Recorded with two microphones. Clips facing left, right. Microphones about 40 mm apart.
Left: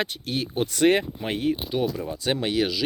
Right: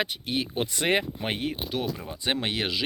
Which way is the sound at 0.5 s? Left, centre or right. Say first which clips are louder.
Left 6 dB; right.